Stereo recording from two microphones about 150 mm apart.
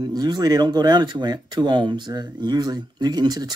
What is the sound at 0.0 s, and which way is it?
Speech, 25° right (ahead or behind).